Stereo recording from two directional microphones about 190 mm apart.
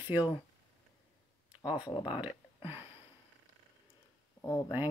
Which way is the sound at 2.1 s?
10° right (ahead or behind).